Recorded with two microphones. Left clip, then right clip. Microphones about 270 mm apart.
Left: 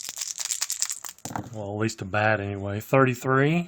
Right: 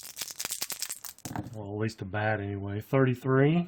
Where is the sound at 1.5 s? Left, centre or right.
Left.